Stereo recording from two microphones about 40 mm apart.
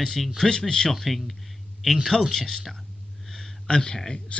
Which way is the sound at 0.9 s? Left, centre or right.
Centre.